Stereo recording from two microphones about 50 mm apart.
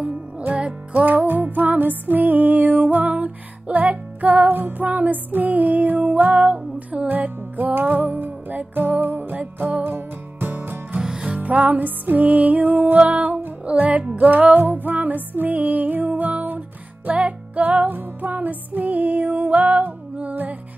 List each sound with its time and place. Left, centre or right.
0.0 s music: right
11.0 s music: centre
11.3 s music: right